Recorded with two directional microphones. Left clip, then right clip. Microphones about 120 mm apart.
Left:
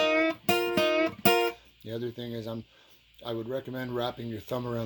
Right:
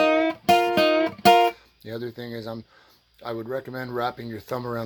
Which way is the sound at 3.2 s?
5° right (ahead or behind).